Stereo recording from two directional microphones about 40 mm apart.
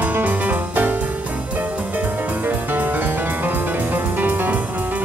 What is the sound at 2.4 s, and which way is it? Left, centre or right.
Music, right.